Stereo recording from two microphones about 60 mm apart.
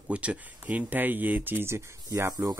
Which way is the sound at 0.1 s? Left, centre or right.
Right.